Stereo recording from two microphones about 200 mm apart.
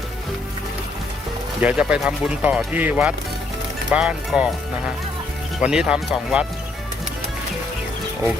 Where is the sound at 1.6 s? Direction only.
5° right (ahead or behind).